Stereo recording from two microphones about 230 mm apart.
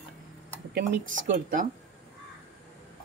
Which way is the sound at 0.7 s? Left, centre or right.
Right.